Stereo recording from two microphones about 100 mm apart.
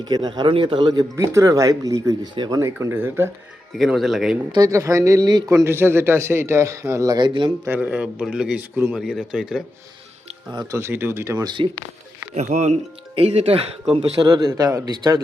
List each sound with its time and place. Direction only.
0.0 s speech: 45° right (ahead or behind)
1.1 s speech: 30° right (ahead or behind)
2.3 s speech: 50° right (ahead or behind)
2.8 s a man's voice: 25° right (ahead or behind)
3.8 s speech: 5° right (ahead or behind)
4.5 s a man's voice: 35° right (ahead or behind); by 7.5 s 55° right (ahead or behind)
7.8 s speech: 15° right (ahead or behind)
8.7 s a man's voice: 20° right (ahead or behind)
9.0 s speech: 5° right (ahead or behind)
10.7 s a man's voice: 25° right (ahead or behind)
11.3 s speech: 50° right (ahead or behind)
12.5 s speech: 90° right; by 14.0 s 70° right (ahead or behind)
14.2 s speech: 45° right (ahead or behind)
14.6 s speech: 35° right (ahead or behind)